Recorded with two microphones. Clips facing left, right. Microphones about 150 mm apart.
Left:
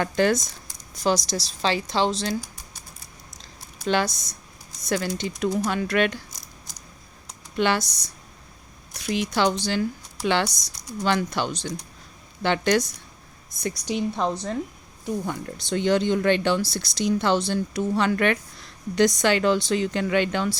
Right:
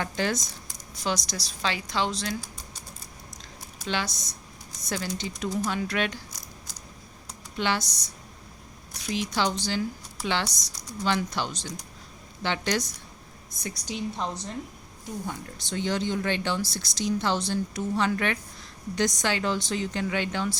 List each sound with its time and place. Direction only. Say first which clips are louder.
0.0 s speech: left 7 dB; 55° left (ahead or behind)
0.9 s a woman's voice: left 7 dB; 35° left (ahead or behind)
3.8 s speech: left 7 dB; 50° left (ahead or behind)
4.9 s speech: left 6 dB; 60° left (ahead or behind)
7.5 s speech: left 5 dB; 60° left (ahead or behind)